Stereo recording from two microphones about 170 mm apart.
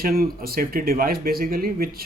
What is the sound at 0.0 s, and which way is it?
Speech, 60° right (ahead or behind).